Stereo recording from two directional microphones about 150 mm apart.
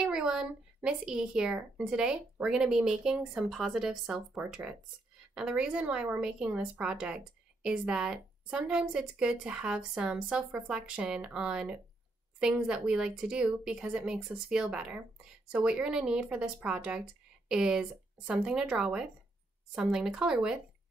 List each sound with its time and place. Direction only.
0.0 s a woman's voice: 5° right (ahead or behind)